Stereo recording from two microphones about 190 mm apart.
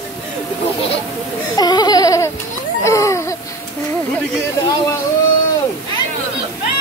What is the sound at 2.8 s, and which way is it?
Speech, 15° left (ahead or behind).